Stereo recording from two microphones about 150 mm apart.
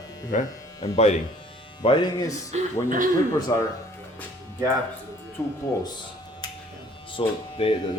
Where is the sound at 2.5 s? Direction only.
60° right (ahead or behind).